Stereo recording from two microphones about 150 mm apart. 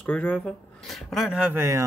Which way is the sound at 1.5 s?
20° right (ahead or behind).